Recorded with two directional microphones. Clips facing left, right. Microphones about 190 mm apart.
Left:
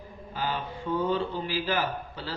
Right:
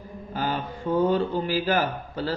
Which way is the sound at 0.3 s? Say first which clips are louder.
Right 4 dB; 45° right (ahead or behind).